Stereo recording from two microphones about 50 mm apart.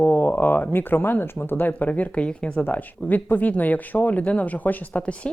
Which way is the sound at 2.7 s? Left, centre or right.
Left.